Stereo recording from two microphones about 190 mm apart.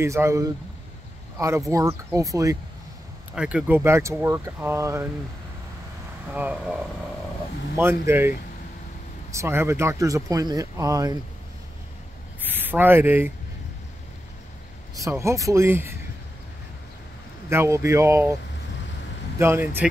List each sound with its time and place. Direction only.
0.0 s speech: 15° right (ahead or behind)
3.3 s speech: 5° right (ahead or behind)
6.3 s speech: 5° right (ahead or behind)
8.1 s speech: 15° right (ahead or behind)
9.3 s speech: 15° right (ahead or behind)
12.4 s speech: 10° right (ahead or behind)
15.0 s speech: 15° right (ahead or behind)
17.5 s speech: 15° right (ahead or behind)